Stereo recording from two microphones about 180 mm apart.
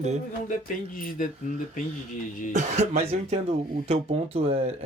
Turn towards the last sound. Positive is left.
turn(degrees=-35)  # may be behind; listen again after turning